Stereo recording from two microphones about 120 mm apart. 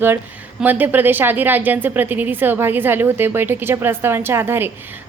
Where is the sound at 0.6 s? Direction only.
15° right (ahead or behind).